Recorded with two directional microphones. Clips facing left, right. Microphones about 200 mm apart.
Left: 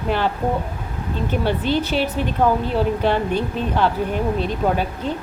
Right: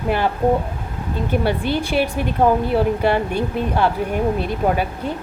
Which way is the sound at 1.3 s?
10° right (ahead or behind).